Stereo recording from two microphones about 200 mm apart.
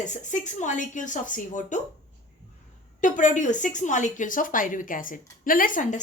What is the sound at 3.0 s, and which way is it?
Speech, 40° left (ahead or behind).